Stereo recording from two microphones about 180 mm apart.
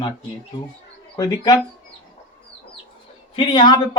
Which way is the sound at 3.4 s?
25° left (ahead or behind).